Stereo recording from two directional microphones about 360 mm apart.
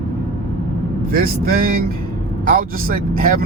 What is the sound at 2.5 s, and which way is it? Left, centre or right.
Speech, right.